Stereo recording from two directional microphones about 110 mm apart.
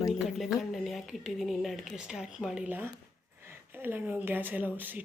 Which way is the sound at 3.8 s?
20° right (ahead or behind).